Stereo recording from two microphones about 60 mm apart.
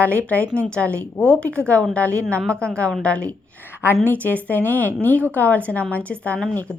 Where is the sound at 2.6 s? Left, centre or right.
Centre.